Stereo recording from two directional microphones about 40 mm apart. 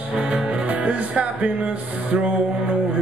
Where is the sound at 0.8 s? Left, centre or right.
Right.